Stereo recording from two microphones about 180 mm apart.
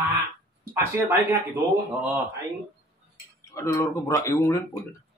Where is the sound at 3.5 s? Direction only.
15° left (ahead or behind).